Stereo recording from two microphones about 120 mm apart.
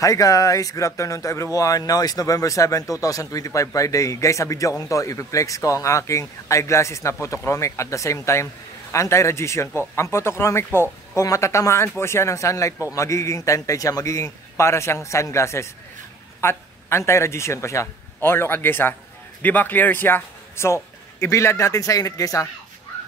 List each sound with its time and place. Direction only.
0.0 s a man's voice: 25° left (ahead or behind)